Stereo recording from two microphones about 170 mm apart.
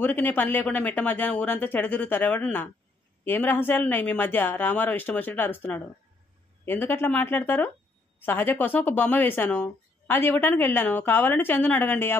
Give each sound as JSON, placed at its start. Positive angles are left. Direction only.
{"t": 0.0, "sound": "speech", "side_deg": 10}